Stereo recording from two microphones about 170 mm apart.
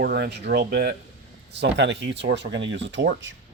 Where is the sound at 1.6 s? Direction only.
90° right.